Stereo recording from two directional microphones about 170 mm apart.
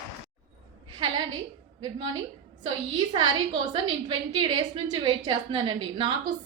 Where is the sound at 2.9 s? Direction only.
25° right (ahead or behind).